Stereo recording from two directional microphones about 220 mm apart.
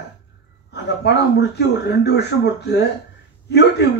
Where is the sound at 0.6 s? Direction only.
50° left (ahead or behind).